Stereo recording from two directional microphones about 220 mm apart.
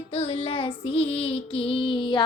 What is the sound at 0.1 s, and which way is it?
Child singing, 25° left (ahead or behind).